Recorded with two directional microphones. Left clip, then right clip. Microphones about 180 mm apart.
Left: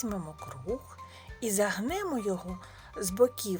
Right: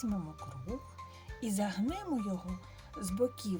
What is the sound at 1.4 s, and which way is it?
Speech, 20° left (ahead or behind).